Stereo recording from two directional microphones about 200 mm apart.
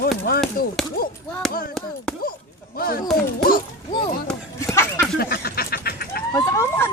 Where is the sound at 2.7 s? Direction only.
50° left (ahead or behind).